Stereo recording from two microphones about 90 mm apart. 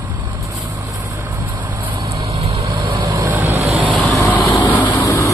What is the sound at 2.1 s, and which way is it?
Vehicle, 35° right (ahead or behind).